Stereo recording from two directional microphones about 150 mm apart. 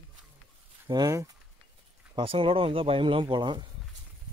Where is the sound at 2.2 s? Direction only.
35° right (ahead or behind).